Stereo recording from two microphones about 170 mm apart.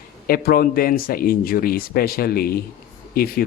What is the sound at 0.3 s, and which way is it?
A man's voice, 60° left (ahead or behind).